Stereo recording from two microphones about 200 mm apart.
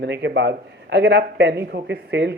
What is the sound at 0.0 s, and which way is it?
Speech, 60° right (ahead or behind).